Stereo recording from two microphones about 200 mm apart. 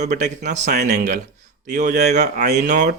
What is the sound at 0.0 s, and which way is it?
Speech, 35° right (ahead or behind).